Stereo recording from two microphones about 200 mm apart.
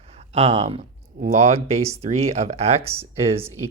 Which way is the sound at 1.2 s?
30° right (ahead or behind).